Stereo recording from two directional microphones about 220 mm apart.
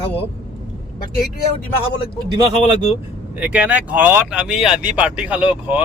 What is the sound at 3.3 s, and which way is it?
Speech, 5° right (ahead or behind).